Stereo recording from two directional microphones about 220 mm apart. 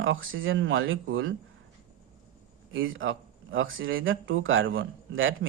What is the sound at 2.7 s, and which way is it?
Speech, 60° right (ahead or behind).